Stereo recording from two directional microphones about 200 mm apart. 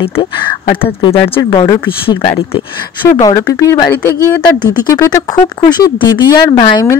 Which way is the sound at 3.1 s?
15° left (ahead or behind).